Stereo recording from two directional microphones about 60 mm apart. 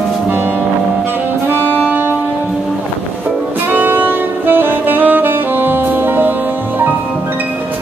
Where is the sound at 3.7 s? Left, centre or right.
Right.